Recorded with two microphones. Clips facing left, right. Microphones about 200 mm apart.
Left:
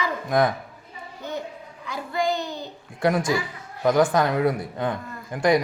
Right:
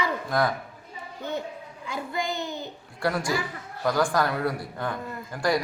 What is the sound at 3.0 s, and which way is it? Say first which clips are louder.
Speech: left 4 dB; 20° left (ahead or behind).